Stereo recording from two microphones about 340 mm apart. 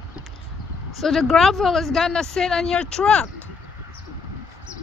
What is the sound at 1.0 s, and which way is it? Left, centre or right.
Speech, centre.